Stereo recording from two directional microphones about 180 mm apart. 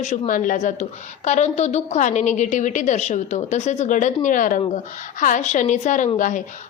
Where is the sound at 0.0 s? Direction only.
45° left (ahead or behind).